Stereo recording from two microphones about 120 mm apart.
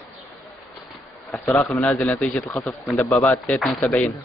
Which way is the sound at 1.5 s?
15° left (ahead or behind).